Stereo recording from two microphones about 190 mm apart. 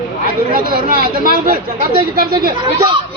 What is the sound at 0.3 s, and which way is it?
Speech, 50° right (ahead or behind).